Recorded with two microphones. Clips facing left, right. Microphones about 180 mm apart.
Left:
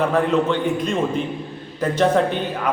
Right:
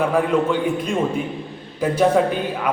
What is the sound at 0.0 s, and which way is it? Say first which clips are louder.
A man's voice: even; 10° right (ahead or behind).